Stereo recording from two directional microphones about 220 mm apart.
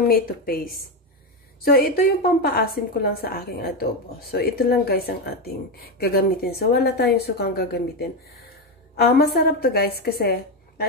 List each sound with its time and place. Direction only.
0.1 s speech: 45° left (ahead or behind)